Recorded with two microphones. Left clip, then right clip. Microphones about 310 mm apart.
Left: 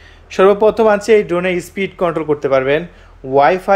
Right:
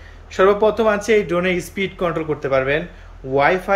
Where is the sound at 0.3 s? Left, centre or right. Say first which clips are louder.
Left 4 dB; left.